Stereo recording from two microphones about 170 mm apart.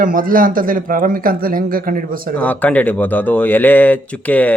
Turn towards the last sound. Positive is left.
turn(degrees=10)  # may be behind; listen again after turning